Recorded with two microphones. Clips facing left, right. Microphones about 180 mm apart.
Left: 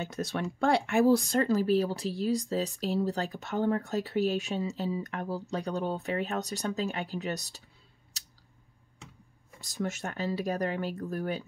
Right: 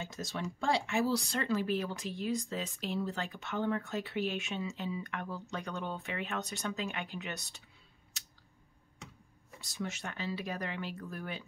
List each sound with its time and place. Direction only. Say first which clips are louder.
0.0 s speech: left 6 dB; 60° left (ahead or behind); by 7.6 s 35° left (ahead or behind)
9.6 s speech: left 6 dB; 45° left (ahead or behind)